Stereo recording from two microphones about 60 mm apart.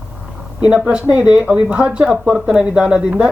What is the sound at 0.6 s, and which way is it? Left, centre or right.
Speech, centre.